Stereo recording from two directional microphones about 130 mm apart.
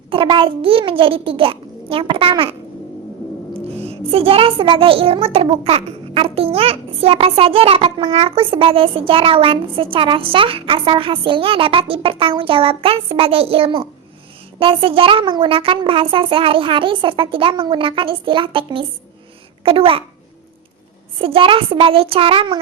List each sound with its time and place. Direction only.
0.1 s a child's voice: 40° right (ahead or behind)
21.2 s a child's voice: 45° right (ahead or behind)